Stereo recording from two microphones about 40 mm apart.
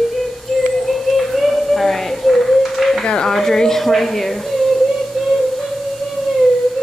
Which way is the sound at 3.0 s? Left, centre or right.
Centre.